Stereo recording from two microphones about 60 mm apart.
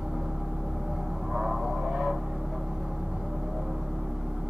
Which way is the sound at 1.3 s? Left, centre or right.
Centre.